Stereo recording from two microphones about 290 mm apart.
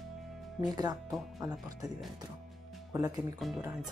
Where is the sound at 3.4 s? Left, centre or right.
Centre.